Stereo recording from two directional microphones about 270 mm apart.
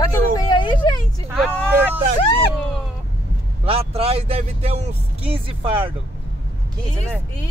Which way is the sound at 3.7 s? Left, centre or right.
Right.